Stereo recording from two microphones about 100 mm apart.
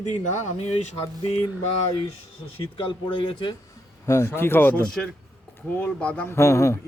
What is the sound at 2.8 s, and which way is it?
Speech, 55° left (ahead or behind).